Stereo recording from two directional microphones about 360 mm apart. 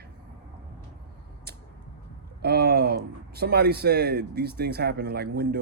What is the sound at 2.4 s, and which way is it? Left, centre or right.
Speech, right.